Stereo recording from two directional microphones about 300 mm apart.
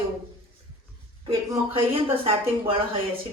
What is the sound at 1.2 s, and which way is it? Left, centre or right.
Speech, centre.